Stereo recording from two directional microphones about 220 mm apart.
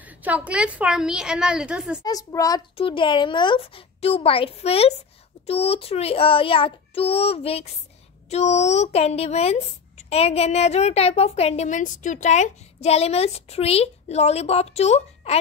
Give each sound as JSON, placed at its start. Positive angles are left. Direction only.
{"t": 0.0, "sound": "a woman's voice", "side_deg": -5}
{"t": 2.0, "sound": "speech", "side_deg": 15}